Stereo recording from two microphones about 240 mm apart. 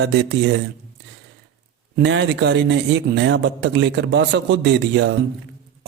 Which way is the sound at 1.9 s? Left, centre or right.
Right.